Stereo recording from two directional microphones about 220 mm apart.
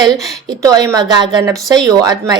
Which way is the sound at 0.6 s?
15° right (ahead or behind).